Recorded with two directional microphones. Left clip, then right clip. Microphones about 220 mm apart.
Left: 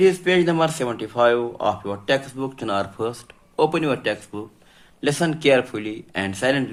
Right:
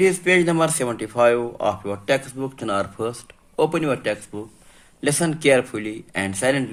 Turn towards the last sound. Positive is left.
turn(degrees=-35)  # may be behind; listen again after turning